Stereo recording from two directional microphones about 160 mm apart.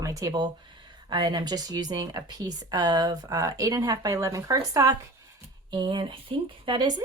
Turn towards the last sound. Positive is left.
turn(degrees=-30)  # may be behind; listen again after turning